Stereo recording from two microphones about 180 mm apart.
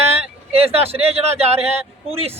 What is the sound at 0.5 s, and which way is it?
A man's voice, 35° right (ahead or behind).